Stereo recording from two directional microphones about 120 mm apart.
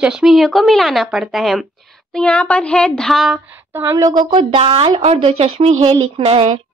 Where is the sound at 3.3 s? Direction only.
20° right (ahead or behind); by 6.6 s 55° right (ahead or behind).